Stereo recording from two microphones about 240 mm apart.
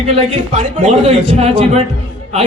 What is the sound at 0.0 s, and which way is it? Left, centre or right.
A man's voice, right.